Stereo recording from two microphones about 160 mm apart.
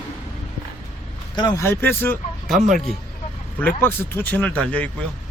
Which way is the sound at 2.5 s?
Centre (ahead or behind).